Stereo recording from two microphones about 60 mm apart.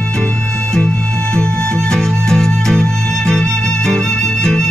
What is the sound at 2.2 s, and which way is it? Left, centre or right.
Music, centre.